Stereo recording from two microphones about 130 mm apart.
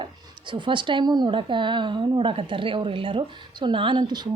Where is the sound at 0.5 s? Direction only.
40° right (ahead or behind).